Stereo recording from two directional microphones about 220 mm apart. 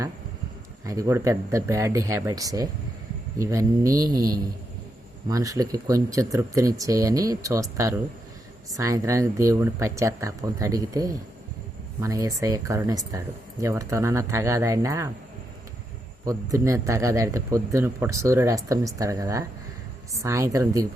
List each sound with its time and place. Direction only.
0.9 s speech: 15° right (ahead or behind)
16.2 s speech: 15° right (ahead or behind)